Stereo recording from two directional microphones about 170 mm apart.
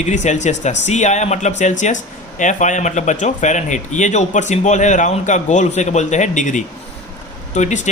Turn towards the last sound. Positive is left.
turn(degrees=45)  # may be behind; listen again after turning